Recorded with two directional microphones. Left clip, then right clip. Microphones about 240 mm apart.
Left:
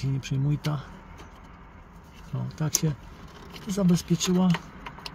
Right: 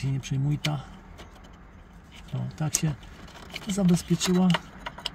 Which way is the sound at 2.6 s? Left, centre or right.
Centre.